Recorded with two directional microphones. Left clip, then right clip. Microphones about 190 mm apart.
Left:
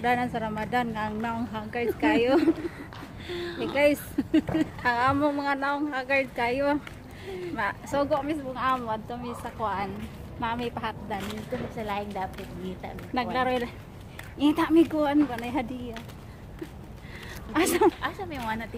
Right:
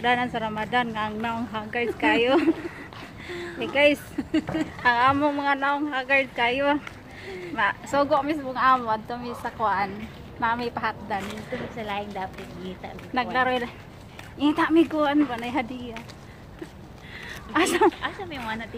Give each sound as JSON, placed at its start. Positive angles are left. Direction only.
{"t": 0.0, "sound": "speech", "side_deg": 0}
{"t": 3.3, "sound": "speech", "side_deg": 35}
{"t": 3.7, "sound": "a woman's voice", "side_deg": -5}
{"t": 4.2, "sound": "speech", "side_deg": 30}
{"t": 4.8, "sound": "speech", "side_deg": -5}
{"t": 7.9, "sound": "a woman's voice", "side_deg": -25}
{"t": 11.1, "sound": "speech", "side_deg": 0}
{"t": 17.5, "sound": "speech", "side_deg": 0}
{"t": 18.0, "sound": "speech", "side_deg": 10}